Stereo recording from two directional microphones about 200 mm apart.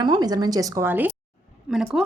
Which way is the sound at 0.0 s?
20° right (ahead or behind).